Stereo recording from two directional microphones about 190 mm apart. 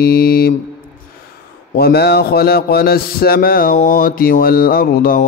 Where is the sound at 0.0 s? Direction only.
50° left (ahead or behind).